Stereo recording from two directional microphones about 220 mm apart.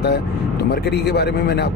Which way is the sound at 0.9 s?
50° left (ahead or behind).